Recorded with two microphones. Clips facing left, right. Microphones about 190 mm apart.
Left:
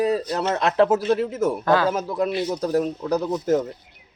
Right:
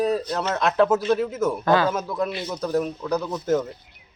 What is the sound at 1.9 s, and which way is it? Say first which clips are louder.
A man's voice: left 2 dB; 30° left (ahead or behind).